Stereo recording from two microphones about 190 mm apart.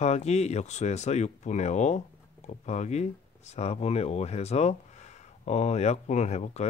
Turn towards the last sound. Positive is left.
turn(degrees=35)  # may be behind; listen again after turning